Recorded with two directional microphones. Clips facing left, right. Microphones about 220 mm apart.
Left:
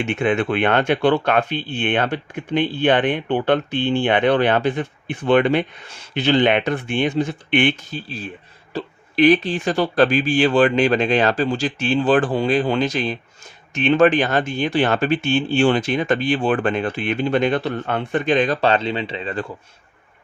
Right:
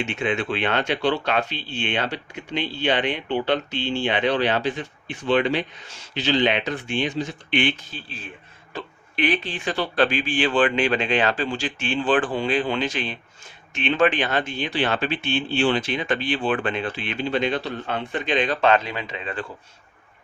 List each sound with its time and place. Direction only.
0.0 s speech: 55° left (ahead or behind); by 19.5 s 35° left (ahead or behind)